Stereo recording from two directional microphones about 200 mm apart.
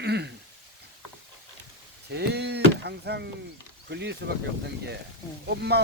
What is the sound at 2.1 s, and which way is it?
Speech, 55° right (ahead or behind).